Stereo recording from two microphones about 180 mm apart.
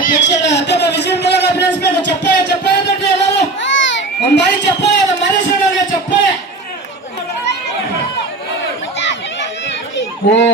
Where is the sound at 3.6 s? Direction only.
90° left; by 5.0 s 75° left (ahead or behind).